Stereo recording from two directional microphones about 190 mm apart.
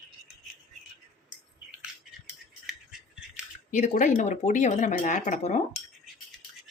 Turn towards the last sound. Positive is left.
turn(degrees=40)  # may be behind; listen again after turning